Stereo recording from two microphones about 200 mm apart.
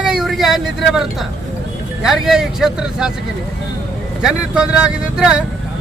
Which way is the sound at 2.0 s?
Centre (ahead or behind).